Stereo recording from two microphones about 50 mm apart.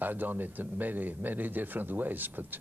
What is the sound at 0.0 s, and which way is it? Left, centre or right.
Speech, right.